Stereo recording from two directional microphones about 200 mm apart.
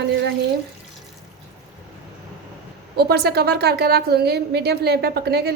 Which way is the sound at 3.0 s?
50° right (ahead or behind).